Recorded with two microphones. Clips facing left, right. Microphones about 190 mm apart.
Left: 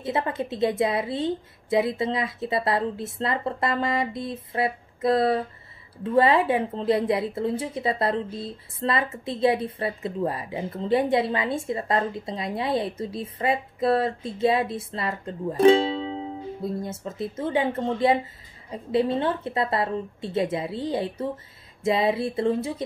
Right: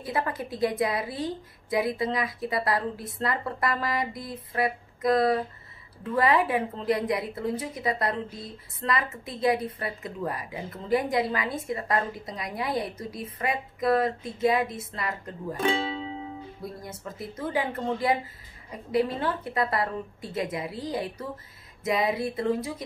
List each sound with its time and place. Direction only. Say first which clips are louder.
0.0 s a woman's voice: left 3 dB; 25° left (ahead or behind)